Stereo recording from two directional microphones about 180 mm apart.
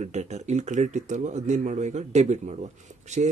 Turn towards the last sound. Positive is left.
turn(degrees=-40)  # may be behind; listen again after turning